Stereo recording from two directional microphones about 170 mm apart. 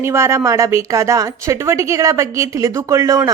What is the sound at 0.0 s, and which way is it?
A woman's voice, 15° right (ahead or behind).